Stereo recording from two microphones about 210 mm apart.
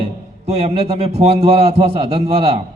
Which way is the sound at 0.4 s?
30° right (ahead or behind).